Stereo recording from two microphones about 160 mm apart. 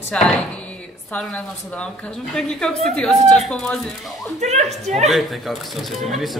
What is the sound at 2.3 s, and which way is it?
A woman's voice, 5° left (ahead or behind).